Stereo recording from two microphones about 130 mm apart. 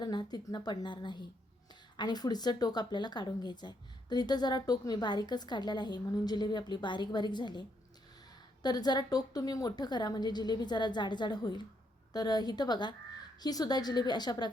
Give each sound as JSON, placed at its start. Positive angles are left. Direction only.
{"t": 0.0, "sound": "a woman's voice", "side_deg": 30}
{"t": 8.6, "sound": "a woman's voice", "side_deg": 30}